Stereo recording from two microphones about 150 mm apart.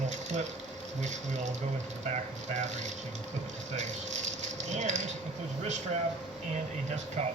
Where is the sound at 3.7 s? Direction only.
50° right (ahead or behind).